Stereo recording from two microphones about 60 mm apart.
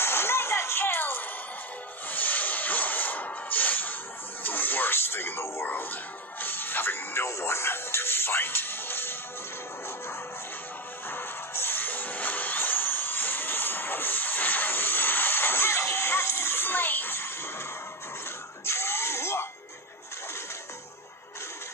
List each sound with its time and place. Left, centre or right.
0.0 s music: left
2.0 s a sound: left
4.4 s television: left
6.4 s music: left
11.1 s music: left
18.7 s a sound: left